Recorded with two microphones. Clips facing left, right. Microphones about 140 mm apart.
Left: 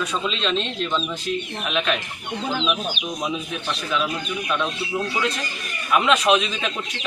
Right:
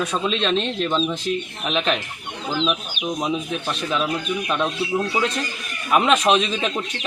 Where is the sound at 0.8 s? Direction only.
30° right (ahead or behind).